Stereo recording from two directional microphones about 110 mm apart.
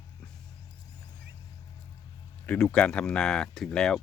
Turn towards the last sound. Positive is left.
turn(degrees=5)  # may be behind; listen again after turning